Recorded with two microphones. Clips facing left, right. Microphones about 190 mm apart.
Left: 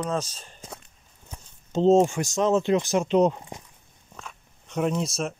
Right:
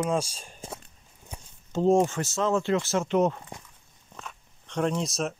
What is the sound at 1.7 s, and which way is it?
Speech, 20° left (ahead or behind).